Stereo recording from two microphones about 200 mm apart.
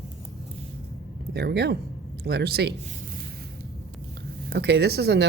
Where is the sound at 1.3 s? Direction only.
55° right (ahead or behind).